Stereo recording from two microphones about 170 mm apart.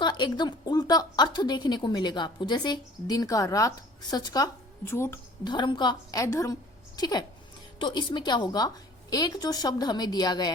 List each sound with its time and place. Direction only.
0.0 s a woman's voice: 25° left (ahead or behind)
5.5 s a woman's voice: 25° left (ahead or behind)